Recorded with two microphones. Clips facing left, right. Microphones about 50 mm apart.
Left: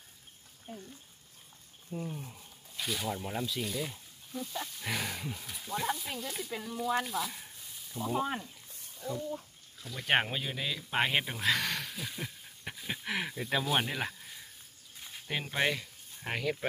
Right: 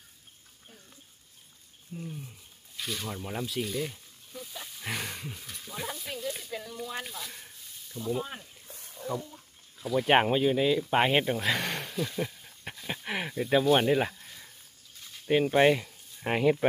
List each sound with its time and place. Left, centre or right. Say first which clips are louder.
2.0 s speech: left 1 dB; centre
2.8 s speech: left 1 dB; centre
8.1 s speech: even; centre
9.8 s speech: right 6 dB; centre